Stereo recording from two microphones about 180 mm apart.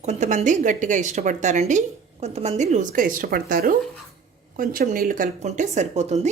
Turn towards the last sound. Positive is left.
turn(degrees=-40)  # may be behind; listen again after turning